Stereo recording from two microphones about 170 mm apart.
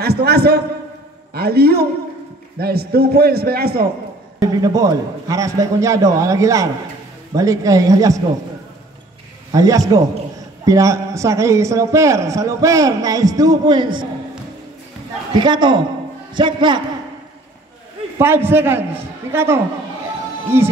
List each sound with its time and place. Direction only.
0.0 s a man's voice: 70° right (ahead or behind)
4.4 s a man's voice: 20° right (ahead or behind)
9.5 s a man's voice: 20° right (ahead or behind)
15.3 s a man's voice: 25° right (ahead or behind)
18.1 s a man's voice: 15° right (ahead or behind)